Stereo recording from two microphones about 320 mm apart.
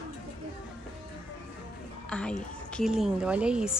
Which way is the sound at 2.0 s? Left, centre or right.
Centre.